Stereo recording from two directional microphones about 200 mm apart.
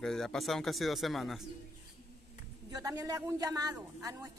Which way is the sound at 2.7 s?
20° right (ahead or behind).